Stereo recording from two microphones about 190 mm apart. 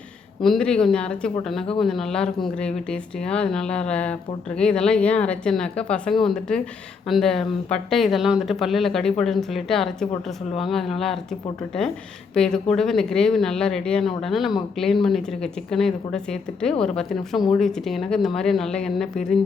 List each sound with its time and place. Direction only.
0.4 s speech: 5° left (ahead or behind)